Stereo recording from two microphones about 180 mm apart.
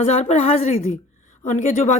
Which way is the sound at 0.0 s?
40° left (ahead or behind).